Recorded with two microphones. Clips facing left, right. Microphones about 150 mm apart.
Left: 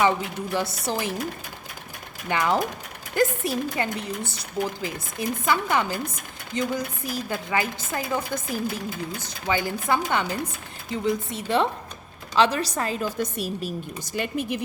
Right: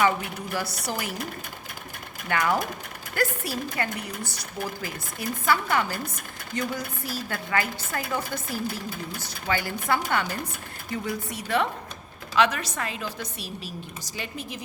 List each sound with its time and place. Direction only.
0.5 s speech: 25° left (ahead or behind)
2.3 s speech: 20° left (ahead or behind)
5.5 s chopping: 20° left (ahead or behind)
6.5 s a woman's voice: 20° left (ahead or behind); by 14.6 s 55° left (ahead or behind)